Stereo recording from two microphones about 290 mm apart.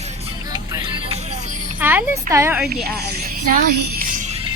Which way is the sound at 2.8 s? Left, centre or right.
Right.